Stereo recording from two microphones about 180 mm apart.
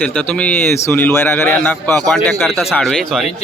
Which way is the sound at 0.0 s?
5° left (ahead or behind).